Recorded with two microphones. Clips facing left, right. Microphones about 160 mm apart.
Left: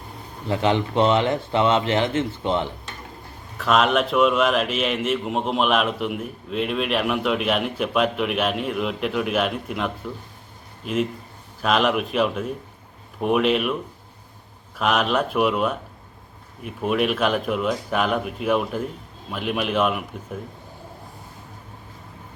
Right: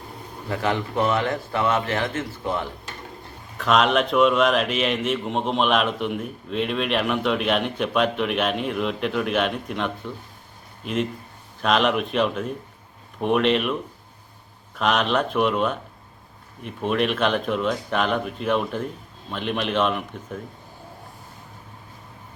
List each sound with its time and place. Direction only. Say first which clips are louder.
0.4 s speech: left 4 dB; 20° left (ahead or behind)
3.6 s a man's voice: even; centre (ahead or behind)
14.8 s a man's voice: even; 5° left (ahead or behind)